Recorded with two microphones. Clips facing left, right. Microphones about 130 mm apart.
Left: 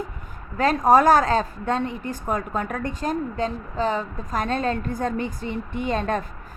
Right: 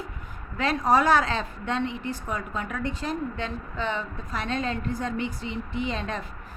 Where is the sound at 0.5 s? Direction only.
45° left (ahead or behind).